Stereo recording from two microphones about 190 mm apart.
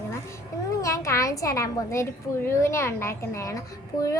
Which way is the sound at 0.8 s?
15° left (ahead or behind).